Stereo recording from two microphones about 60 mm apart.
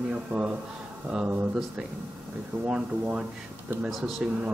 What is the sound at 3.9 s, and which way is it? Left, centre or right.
Speech, centre.